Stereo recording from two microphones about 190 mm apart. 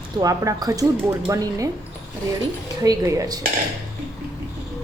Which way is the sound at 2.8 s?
15° right (ahead or behind).